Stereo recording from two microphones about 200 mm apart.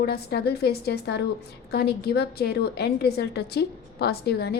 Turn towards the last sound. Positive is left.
turn(degrees=55)  # may be behind; listen again after turning